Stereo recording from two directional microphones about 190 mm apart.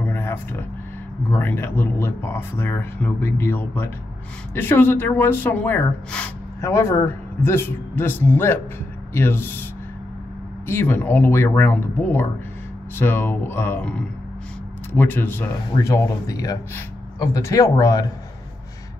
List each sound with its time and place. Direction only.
0.0 s a sound: 10° left (ahead or behind)
1.3 s speech: 10° left (ahead or behind)
10.7 s speech: 10° left (ahead or behind)